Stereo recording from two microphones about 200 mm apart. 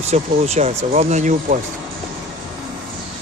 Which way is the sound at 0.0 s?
35° right (ahead or behind).